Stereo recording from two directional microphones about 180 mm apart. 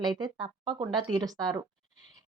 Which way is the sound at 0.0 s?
25° right (ahead or behind).